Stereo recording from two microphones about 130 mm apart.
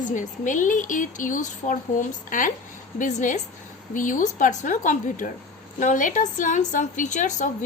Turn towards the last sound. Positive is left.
turn(degrees=75)  # may be behind; listen again after turning